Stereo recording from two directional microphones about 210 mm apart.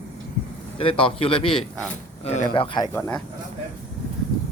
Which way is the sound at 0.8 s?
25° left (ahead or behind).